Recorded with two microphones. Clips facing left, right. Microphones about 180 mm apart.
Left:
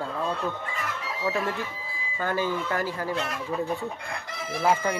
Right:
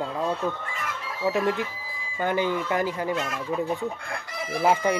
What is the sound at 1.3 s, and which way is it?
Speech, 20° right (ahead or behind).